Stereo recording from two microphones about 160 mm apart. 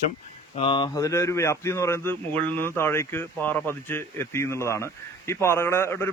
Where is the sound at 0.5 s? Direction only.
35° left (ahead or behind).